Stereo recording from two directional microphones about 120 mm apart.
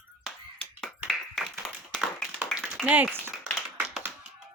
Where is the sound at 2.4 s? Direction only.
5° right (ahead or behind).